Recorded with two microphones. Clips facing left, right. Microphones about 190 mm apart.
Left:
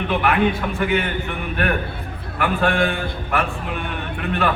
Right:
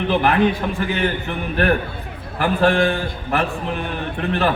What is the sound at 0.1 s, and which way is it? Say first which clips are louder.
A man's voice: right 2 dB; 35° right (ahead or behind).